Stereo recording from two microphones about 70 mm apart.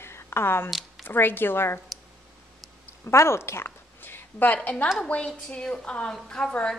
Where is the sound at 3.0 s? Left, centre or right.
Left.